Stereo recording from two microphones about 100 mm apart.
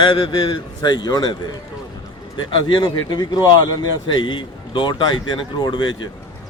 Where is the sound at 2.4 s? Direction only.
55° left (ahead or behind).